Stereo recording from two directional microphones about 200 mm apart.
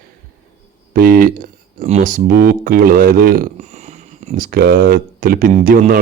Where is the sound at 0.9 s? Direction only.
45° right (ahead or behind).